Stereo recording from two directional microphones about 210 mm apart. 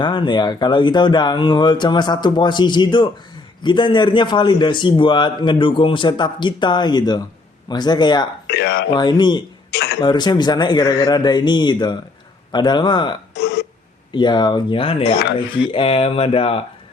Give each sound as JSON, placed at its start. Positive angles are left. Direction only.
{"t": 0.0, "sound": "a man's voice", "side_deg": 20}
{"t": 8.4, "sound": "speech", "side_deg": 55}
{"t": 8.9, "sound": "a man's voice", "side_deg": 20}
{"t": 13.3, "sound": "burping", "side_deg": 50}
{"t": 14.1, "sound": "a man's voice", "side_deg": 20}